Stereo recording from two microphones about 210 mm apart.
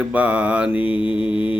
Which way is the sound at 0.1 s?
5° right (ahead or behind).